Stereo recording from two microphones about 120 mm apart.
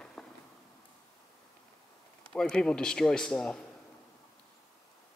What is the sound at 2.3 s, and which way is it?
A man's voice, 5° left (ahead or behind).